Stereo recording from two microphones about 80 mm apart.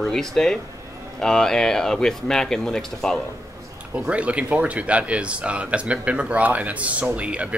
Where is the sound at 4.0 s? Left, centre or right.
Centre.